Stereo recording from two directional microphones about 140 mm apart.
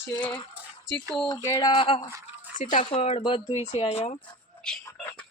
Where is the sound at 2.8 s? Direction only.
45° left (ahead or behind).